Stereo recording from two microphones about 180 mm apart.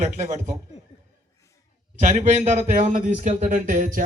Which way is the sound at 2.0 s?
40° right (ahead or behind).